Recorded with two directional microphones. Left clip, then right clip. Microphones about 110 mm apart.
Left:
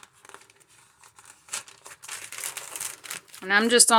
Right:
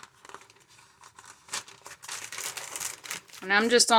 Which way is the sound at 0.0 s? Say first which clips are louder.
Right 1 dB; 35° left (ahead or behind).